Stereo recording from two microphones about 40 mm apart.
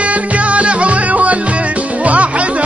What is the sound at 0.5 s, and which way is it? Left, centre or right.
Music, right.